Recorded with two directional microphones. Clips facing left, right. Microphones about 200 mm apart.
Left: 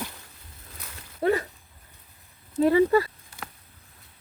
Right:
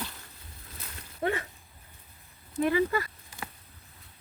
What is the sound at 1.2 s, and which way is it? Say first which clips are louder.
Speech: left 7 dB; 35° left (ahead or behind).